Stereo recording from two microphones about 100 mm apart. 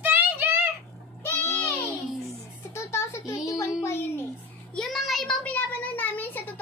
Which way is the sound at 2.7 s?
30° left (ahead or behind).